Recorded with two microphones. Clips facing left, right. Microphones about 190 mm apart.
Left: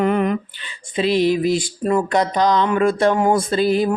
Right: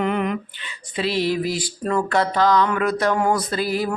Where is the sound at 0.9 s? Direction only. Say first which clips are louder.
Left 5 dB; 20° left (ahead or behind).